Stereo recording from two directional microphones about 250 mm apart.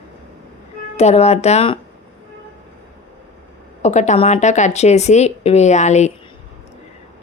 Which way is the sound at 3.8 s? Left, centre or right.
Left.